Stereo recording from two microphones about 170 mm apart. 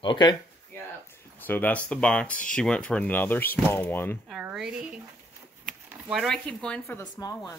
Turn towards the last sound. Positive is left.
turn(degrees=20)  # may be behind; listen again after turning